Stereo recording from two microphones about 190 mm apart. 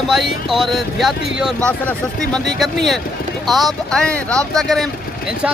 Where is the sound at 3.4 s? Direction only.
Centre (ahead or behind).